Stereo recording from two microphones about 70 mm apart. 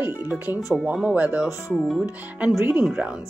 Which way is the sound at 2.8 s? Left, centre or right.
Centre.